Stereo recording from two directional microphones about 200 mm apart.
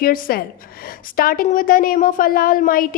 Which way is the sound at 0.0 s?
45° left (ahead or behind).